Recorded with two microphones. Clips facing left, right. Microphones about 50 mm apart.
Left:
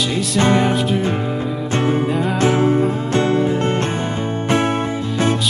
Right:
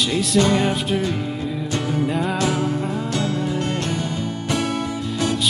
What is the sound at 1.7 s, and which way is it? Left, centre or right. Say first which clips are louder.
Music: left 5 dB; left.